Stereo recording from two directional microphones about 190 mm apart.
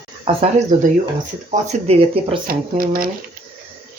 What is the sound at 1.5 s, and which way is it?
Speech, 35° right (ahead or behind).